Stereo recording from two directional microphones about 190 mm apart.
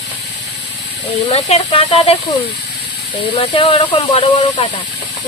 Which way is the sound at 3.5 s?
25° left (ahead or behind).